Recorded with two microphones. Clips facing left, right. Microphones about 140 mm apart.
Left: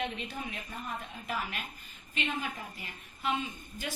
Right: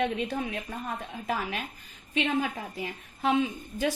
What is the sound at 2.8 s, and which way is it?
Speech, 90° right.